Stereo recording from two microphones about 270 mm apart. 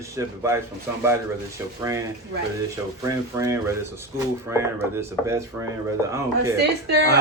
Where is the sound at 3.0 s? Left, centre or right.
Centre.